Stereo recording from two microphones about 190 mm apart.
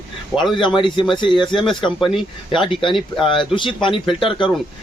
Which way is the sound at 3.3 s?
25° left (ahead or behind).